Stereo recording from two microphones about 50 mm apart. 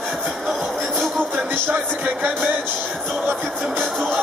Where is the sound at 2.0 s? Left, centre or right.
Right.